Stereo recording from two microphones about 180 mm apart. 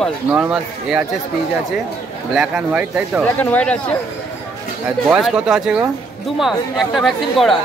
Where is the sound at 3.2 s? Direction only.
10° left (ahead or behind).